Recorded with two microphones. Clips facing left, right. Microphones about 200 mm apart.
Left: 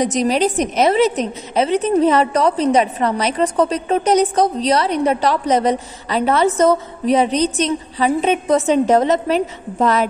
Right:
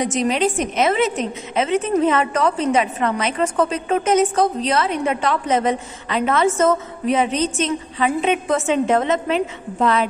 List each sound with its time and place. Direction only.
0.0 s a woman's voice: 40° left (ahead or behind)